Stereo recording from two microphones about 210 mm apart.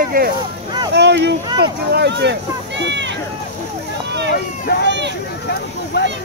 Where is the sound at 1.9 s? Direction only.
55° right (ahead or behind).